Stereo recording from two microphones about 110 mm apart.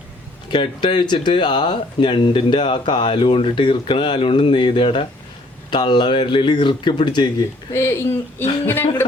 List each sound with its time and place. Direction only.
0.5 s speech: 45° left (ahead or behind)
7.7 s speech: 25° left (ahead or behind)